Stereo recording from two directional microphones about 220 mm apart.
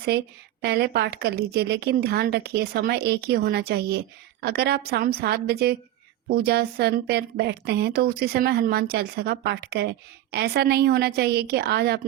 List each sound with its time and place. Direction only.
0.6 s a woman's voice: 45° right (ahead or behind)